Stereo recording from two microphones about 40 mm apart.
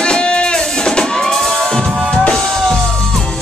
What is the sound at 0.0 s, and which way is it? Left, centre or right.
Music, left.